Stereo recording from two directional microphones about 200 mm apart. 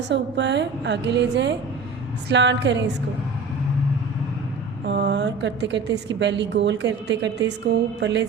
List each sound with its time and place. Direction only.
0.1 s a woman's voice: 60° right (ahead or behind)
4.9 s a woman's voice: 60° right (ahead or behind)